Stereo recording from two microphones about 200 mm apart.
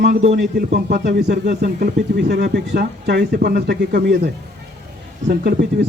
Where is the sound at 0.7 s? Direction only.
55° right (ahead or behind).